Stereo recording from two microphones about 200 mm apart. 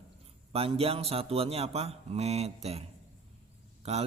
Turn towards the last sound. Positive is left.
turn(degrees=-30)  # may be behind; listen again after turning